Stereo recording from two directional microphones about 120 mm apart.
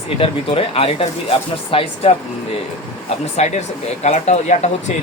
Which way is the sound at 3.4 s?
65° left (ahead or behind).